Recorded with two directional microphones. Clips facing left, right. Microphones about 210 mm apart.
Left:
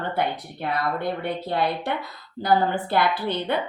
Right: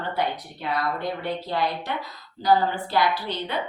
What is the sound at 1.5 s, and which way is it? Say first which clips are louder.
A woman's voice: left 4 dB; 55° left (ahead or behind).